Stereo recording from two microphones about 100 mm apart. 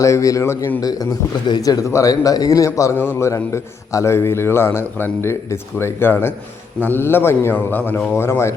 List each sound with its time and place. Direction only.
0.0 s a man's voice: 35° left (ahead or behind)
0.8 s a man's voice: 40° left (ahead or behind)
2.9 s a man's voice: 20° left (ahead or behind)